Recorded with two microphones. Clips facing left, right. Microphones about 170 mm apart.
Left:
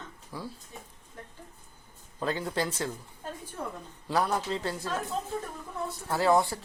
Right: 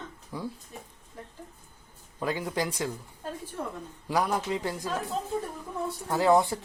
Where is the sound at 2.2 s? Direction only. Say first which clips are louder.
Right 1 dB; 10° right (ahead or behind).